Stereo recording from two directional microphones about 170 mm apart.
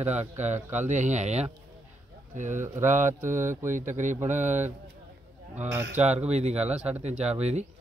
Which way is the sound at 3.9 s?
45° right (ahead or behind).